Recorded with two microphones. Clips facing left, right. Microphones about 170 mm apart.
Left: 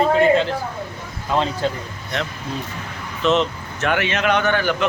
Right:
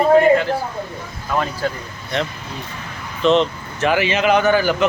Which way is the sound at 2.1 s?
Centre (ahead or behind).